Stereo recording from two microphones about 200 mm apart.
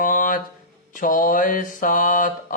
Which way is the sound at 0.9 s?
40° left (ahead or behind).